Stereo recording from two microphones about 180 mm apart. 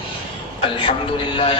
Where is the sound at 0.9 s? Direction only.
30° left (ahead or behind).